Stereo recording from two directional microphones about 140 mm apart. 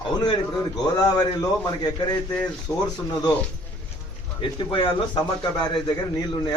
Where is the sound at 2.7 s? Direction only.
15° left (ahead or behind).